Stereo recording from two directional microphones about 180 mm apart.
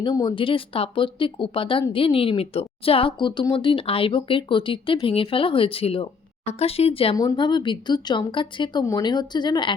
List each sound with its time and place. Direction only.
0.0 s speech: 25° left (ahead or behind)